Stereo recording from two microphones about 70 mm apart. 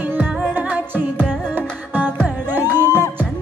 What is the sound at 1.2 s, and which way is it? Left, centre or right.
Music, centre.